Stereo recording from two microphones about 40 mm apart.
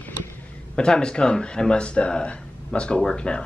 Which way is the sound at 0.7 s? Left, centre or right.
Left.